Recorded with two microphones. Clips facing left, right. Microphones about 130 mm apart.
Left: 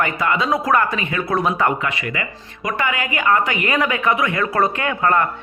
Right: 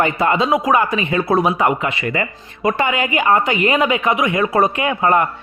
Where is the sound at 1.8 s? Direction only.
30° right (ahead or behind).